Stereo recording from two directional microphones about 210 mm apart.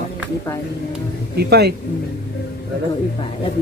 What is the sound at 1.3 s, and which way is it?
Speech, 50° right (ahead or behind).